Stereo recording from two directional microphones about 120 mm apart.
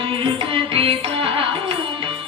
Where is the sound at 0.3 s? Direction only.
50° right (ahead or behind).